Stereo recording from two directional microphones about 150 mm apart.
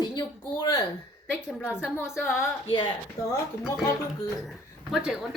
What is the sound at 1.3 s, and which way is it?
A woman's voice, 5° right (ahead or behind).